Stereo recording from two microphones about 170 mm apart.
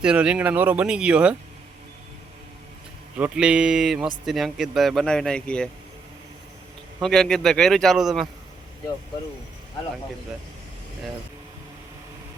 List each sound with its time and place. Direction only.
0.0 s speech: 5° right (ahead or behind)
3.2 s speech: 5° right (ahead or behind)
7.0 s speech: centre (ahead or behind)